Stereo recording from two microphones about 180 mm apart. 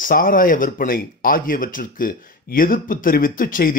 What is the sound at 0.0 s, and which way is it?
Speech, 50° left (ahead or behind).